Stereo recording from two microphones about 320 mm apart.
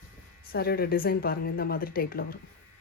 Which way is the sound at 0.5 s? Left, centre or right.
Left.